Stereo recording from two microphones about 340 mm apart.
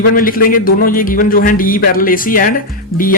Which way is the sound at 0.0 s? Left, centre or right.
Left.